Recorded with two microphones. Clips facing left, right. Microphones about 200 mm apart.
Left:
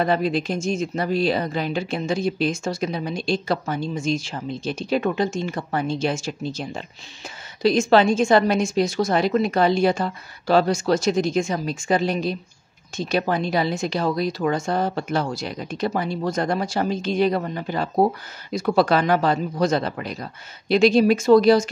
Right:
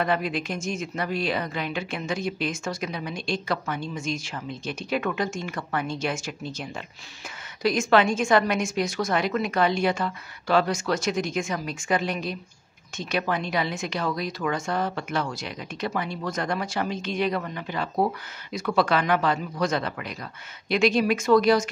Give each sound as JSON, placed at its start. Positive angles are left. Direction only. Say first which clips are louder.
{"t": 0.0, "sound": "speech", "louder": "left 5 dB", "side_deg": 35}